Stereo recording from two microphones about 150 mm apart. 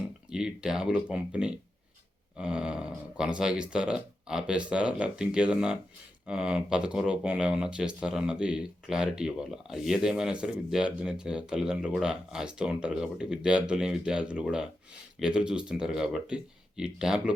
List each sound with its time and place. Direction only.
0.3 s speech: 5° right (ahead or behind)